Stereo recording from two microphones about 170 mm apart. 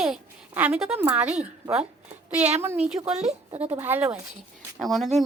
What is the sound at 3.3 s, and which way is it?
Speech, 40° right (ahead or behind).